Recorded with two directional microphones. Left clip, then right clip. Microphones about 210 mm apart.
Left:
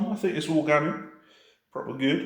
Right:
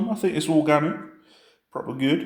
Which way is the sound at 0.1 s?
45° right (ahead or behind).